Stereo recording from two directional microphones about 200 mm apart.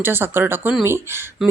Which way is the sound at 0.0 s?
10° right (ahead or behind).